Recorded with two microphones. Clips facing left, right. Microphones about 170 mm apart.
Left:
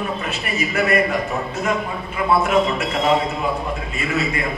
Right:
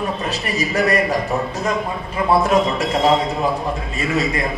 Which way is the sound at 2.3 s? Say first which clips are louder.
Right 1 dB; 35° right (ahead or behind).